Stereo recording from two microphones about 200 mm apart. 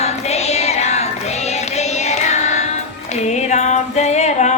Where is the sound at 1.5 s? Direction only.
35° left (ahead or behind).